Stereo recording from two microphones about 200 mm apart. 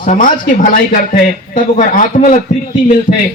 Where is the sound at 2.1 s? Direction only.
40° left (ahead or behind).